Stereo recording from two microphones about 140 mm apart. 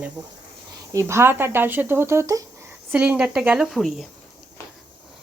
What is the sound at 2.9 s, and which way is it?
A woman's voice, 10° right (ahead or behind).